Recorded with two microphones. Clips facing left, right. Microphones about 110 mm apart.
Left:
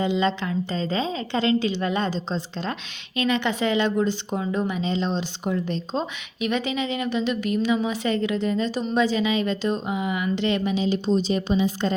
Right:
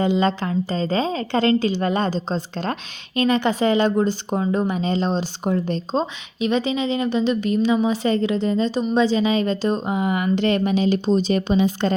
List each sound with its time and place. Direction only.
0.0 s a woman's voice: 45° right (ahead or behind)
3.2 s a woman's voice: 40° right (ahead or behind); by 11.9 s 65° right (ahead or behind)